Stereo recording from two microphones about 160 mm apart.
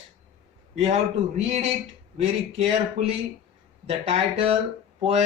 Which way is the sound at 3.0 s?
40° right (ahead or behind).